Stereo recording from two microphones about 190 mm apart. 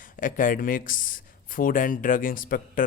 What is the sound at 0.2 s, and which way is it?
Speech, 45° left (ahead or behind).